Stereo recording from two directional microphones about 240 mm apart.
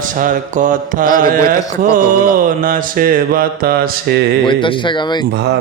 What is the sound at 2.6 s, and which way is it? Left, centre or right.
Mantra, right.